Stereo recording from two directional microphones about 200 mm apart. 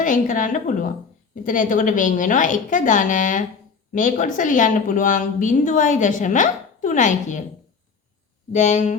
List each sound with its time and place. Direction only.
0.0 s a woman's voice: 40° left (ahead or behind)
8.5 s a woman's voice: 35° left (ahead or behind)